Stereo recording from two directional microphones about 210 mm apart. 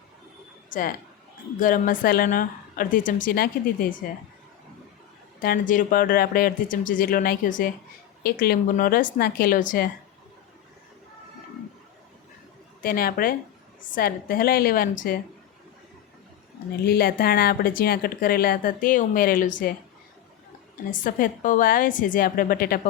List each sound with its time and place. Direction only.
0.7 s a woman's voice: 45° left (ahead or behind)
5.4 s speech: 40° left (ahead or behind)
12.8 s speech: 45° left (ahead or behind)
16.8 s speech: 45° left (ahead or behind)
20.9 s a woman's voice: 40° left (ahead or behind)